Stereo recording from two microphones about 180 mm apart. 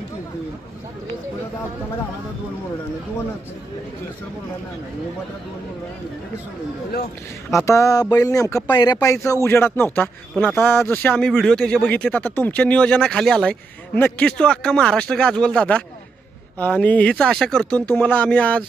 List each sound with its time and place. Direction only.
7.6 s speech: 15° left (ahead or behind)